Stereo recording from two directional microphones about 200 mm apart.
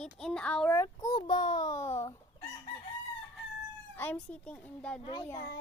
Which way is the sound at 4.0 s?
5° left (ahead or behind).